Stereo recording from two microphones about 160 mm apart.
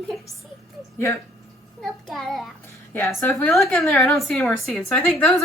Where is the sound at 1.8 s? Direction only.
Centre (ahead or behind).